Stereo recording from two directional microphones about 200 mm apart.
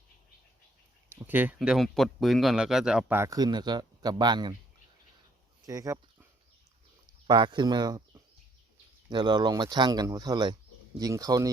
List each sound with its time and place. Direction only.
1.1 s speech: 10° right (ahead or behind)
5.6 s speech: 15° right (ahead or behind)
7.3 s speech: 25° right (ahead or behind)